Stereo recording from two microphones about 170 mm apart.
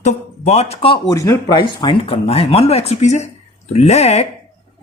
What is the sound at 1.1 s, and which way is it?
Speech, 20° left (ahead or behind).